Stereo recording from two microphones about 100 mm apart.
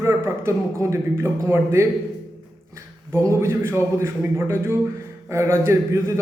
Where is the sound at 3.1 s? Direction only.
25° right (ahead or behind).